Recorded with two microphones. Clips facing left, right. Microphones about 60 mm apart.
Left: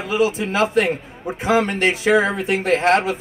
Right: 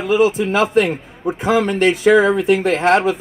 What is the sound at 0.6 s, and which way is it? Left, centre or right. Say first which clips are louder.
Speech: right 1 dB; left.